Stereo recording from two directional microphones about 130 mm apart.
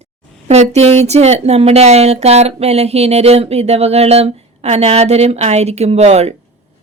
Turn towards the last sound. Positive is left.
turn(degrees=-55)  # may be behind; listen again after turning